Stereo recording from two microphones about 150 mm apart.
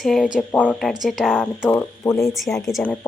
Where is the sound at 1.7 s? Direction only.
15° left (ahead or behind).